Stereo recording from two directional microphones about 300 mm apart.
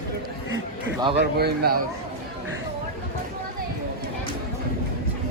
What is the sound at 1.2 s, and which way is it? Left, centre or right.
Speech, right.